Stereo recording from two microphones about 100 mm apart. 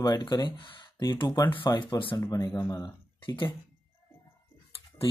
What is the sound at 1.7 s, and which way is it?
Speech, 50° left (ahead or behind).